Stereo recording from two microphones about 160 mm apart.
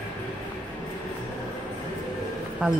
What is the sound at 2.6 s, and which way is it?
Speech, 5° right (ahead or behind).